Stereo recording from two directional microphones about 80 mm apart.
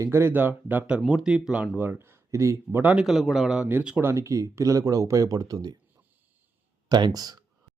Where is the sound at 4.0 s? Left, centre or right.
Right.